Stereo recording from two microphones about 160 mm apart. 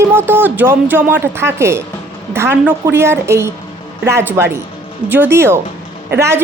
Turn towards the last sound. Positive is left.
turn(degrees=-15)  # may be behind; listen again after turning